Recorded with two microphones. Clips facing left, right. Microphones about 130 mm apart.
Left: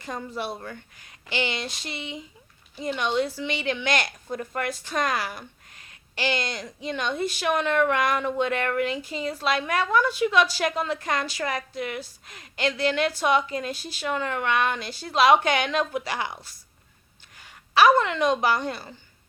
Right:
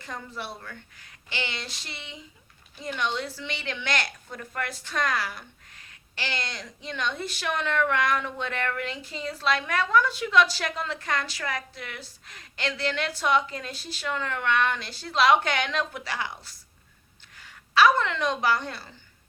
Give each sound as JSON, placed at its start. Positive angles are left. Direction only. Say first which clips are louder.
{"t": 0.0, "sound": "a woman's voice", "louder": "left 5 dB", "side_deg": 20}